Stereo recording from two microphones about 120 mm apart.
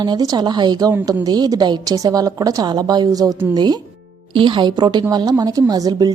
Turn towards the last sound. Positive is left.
turn(degrees=-30)  # may be behind; listen again after turning